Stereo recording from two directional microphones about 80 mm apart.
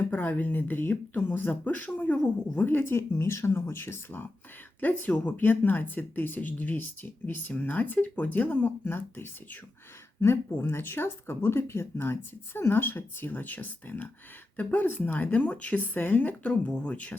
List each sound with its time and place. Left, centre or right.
0.0 s speech: left